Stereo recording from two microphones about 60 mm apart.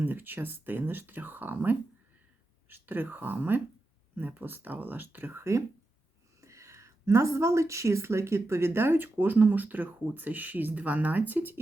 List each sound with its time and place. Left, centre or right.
0.0 s speech: right
5.4 s speech: right